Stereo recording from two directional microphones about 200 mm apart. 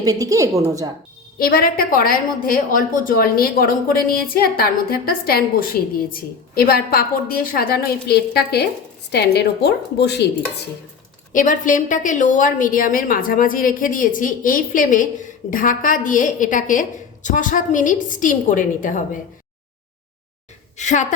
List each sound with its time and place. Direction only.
0.0 s a woman's voice: 15° right (ahead or behind)
1.4 s a woman's voice: 50° left (ahead or behind)
11.3 s a woman's voice: 40° left (ahead or behind)
20.7 s a woman's voice: 35° left (ahead or behind)